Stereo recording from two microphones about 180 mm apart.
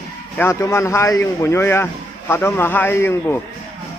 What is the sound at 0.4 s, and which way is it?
A man's voice, 15° left (ahead or behind).